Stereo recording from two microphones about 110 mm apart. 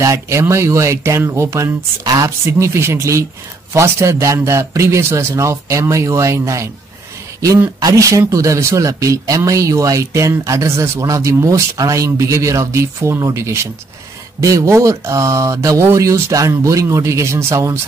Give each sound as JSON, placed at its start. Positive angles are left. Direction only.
{"t": 0.0, "sound": "speech", "side_deg": -25}
{"t": 7.8, "sound": "speech", "side_deg": -30}